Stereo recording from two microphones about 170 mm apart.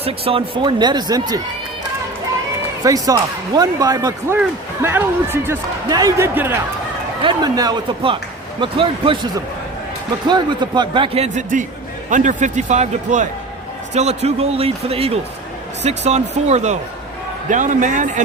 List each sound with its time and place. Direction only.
0.0 s speech: 35° right (ahead or behind)
2.8 s speech: 20° right (ahead or behind)
7.2 s a man's voice: 25° right (ahead or behind); by 18.2 s 50° right (ahead or behind)